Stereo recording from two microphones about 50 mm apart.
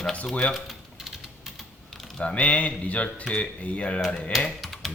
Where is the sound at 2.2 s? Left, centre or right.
Left.